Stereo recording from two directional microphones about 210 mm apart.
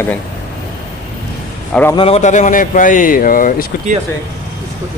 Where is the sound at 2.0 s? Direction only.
30° left (ahead or behind).